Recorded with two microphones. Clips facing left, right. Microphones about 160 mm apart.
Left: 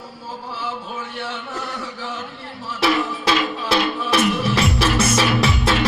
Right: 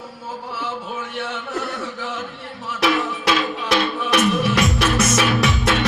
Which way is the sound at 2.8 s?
30° left (ahead or behind).